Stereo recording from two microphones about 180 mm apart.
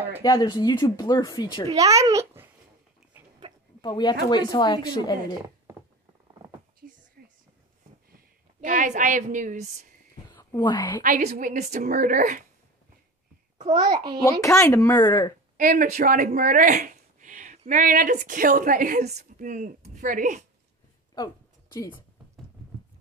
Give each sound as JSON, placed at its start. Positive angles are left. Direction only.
{"t": 0.2, "sound": "a woman's voice", "side_deg": 20}
{"t": 1.7, "sound": "a child's voice", "side_deg": -20}
{"t": 3.8, "sound": "a woman's voice", "side_deg": 25}
{"t": 7.2, "sound": "whispering", "side_deg": -55}
{"t": 8.5, "sound": "a woman's voice", "side_deg": -45}
{"t": 10.3, "sound": "speech", "side_deg": 25}
{"t": 11.0, "sound": "a woman's voice", "side_deg": -45}
{"t": 13.7, "sound": "a child's voice", "side_deg": -25}
{"t": 14.4, "sound": "speech", "side_deg": 15}
{"t": 15.5, "sound": "a woman's voice", "side_deg": -50}